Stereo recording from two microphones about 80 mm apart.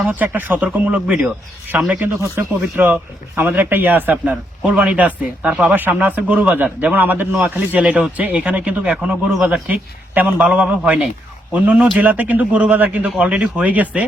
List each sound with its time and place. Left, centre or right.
0.0 s a man's voice: right